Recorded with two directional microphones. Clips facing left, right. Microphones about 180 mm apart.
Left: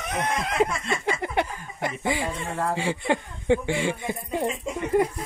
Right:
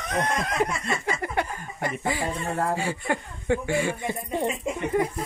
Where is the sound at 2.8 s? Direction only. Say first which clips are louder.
Left 3 dB; 25° left (ahead or behind).